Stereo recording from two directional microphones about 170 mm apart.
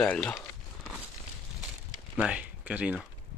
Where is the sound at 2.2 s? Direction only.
5° right (ahead or behind).